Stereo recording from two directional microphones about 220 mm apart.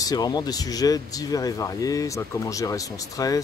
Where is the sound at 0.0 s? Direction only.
20° left (ahead or behind).